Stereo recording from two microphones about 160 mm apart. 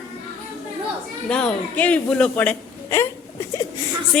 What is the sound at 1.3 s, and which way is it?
A woman's voice, 5° left (ahead or behind).